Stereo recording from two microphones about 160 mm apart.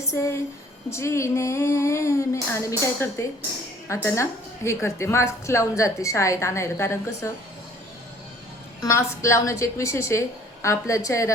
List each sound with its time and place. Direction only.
0.0 s a woman's voice: 20° left (ahead or behind)
8.8 s a woman's voice: 20° left (ahead or behind)